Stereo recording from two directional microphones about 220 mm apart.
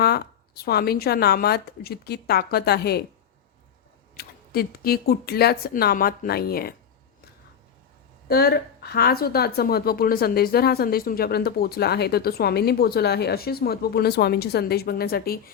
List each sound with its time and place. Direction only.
0.0 s a woman's voice: 45° left (ahead or behind)
4.2 s a woman's voice: 45° left (ahead or behind)
8.3 s a woman's voice: 45° left (ahead or behind)